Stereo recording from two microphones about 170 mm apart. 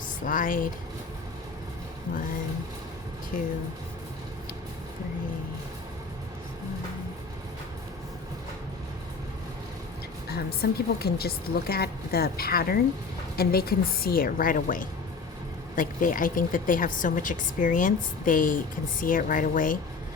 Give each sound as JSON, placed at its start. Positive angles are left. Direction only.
{"t": 0.3, "sound": "a woman's voice", "side_deg": 55}
{"t": 3.3, "sound": "a woman's voice", "side_deg": 55}
{"t": 10.2, "sound": "a woman's voice", "side_deg": 70}